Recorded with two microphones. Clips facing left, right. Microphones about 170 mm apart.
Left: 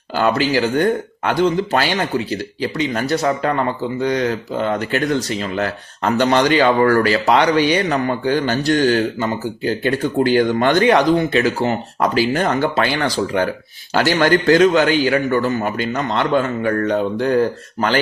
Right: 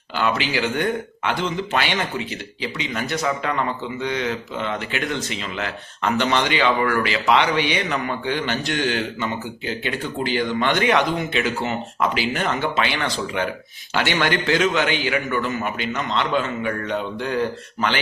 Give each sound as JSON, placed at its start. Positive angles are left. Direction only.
{"t": 0.2, "sound": "speech", "side_deg": 40}